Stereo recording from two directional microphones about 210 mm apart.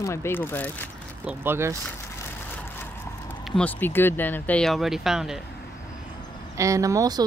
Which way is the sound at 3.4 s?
5° left (ahead or behind).